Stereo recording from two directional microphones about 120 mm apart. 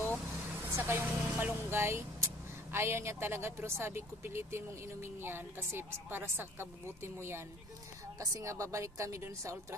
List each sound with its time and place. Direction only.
0.7 s speech: 20° right (ahead or behind)